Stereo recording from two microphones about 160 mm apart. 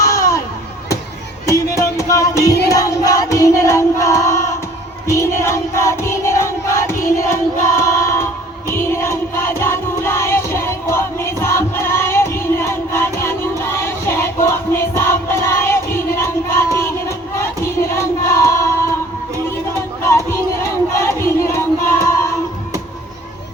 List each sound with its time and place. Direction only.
0.0 s a sound: 20° left (ahead or behind)
1.7 s music: 20° left (ahead or behind)
7.8 s choir: 20° left (ahead or behind)
8.7 s music: 15° left (ahead or behind)
14.4 s crowd: 15° left (ahead or behind)
16.8 s a sound: 15° left (ahead or behind)
17.9 s singing: 15° left (ahead or behind)
20.1 s crowd: 15° left (ahead or behind)